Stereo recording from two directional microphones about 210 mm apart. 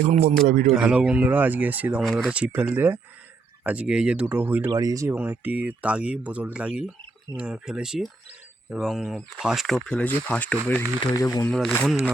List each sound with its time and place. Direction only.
0.4 s speech: 40° right (ahead or behind)
0.7 s speech: 5° right (ahead or behind)
11.2 s speech: 15° left (ahead or behind)
11.5 s speech: centre (ahead or behind)